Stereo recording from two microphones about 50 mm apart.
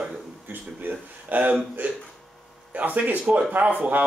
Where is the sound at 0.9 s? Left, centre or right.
Right.